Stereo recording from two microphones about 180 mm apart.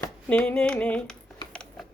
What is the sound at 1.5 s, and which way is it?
Mechanisms, 5° left (ahead or behind).